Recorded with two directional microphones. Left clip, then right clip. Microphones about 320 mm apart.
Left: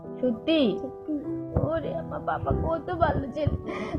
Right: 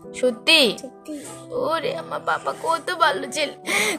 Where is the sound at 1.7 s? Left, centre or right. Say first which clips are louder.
Right 6 dB; centre.